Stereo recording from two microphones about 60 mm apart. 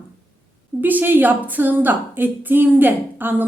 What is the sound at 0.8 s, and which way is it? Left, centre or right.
A woman's voice, right.